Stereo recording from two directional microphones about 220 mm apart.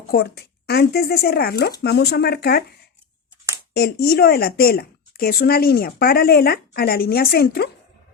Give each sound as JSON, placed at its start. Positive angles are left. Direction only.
{"t": 0.1, "sound": "a woman's voice", "side_deg": 45}
{"t": 3.8, "sound": "a woman's voice", "side_deg": 45}